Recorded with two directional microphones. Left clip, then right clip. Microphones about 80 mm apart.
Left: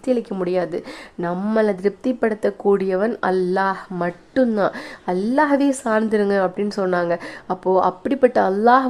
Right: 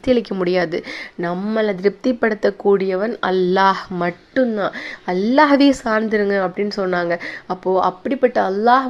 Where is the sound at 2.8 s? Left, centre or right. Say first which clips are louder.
Right 1 dB; left.